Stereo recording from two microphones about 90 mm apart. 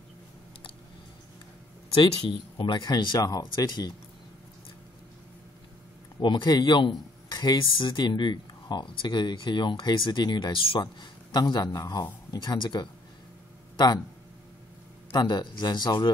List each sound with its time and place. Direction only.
2.0 s a man's voice: 65° left (ahead or behind)
6.2 s a man's voice: 55° left (ahead or behind)
7.6 s a man's voice: 70° left (ahead or behind)
15.1 s a man's voice: 50° left (ahead or behind)